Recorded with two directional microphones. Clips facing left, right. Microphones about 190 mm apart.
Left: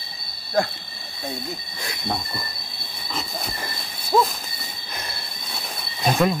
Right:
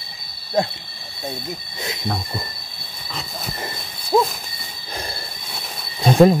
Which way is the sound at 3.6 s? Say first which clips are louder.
Right 3 dB; 20° right (ahead or behind).